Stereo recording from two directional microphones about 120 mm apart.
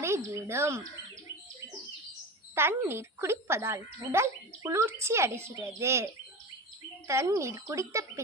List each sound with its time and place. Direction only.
0.3 s speech: 20° right (ahead or behind)
2.6 s speech: 20° right (ahead or behind)
7.1 s speech: 25° right (ahead or behind)